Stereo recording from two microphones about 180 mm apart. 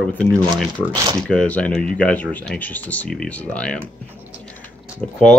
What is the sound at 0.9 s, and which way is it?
Speech, 20° right (ahead or behind).